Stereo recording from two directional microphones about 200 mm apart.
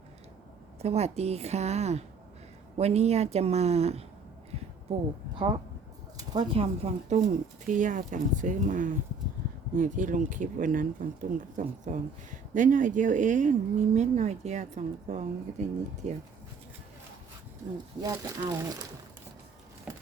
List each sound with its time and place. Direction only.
0.8 s speech: 30° right (ahead or behind)
6.5 s speech: 30° right (ahead or behind)
18.0 s speech: 20° right (ahead or behind)